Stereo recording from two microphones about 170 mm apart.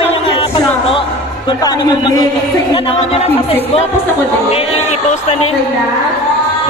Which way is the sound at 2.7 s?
35° left (ahead or behind).